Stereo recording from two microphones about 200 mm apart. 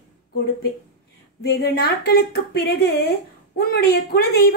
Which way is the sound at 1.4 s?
50° left (ahead or behind).